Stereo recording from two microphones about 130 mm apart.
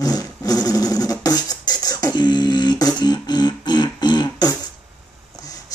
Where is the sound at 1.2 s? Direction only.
30° left (ahead or behind).